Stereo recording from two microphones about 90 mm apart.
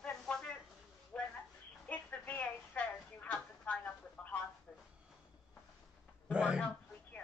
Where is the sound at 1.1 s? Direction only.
20° left (ahead or behind).